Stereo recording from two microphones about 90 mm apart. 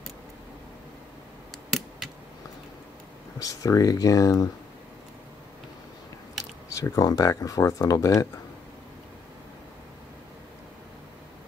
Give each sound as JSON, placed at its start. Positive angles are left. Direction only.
{"t": 3.3, "sound": "speech", "side_deg": 40}
{"t": 6.7, "sound": "speech", "side_deg": 40}